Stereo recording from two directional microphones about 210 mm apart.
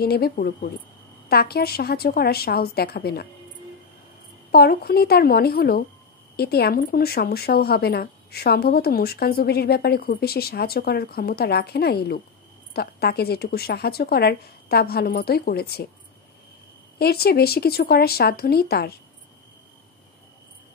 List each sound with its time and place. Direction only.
0.0 s speech: 50° left (ahead or behind)
4.5 s speech: 45° left (ahead or behind)
17.0 s speech: 50° left (ahead or behind)